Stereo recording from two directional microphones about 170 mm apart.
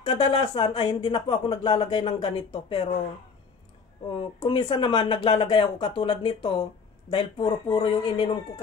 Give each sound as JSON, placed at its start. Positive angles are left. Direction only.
{"t": 0.0, "sound": "speech", "side_deg": 30}
{"t": 4.2, "sound": "speech", "side_deg": 30}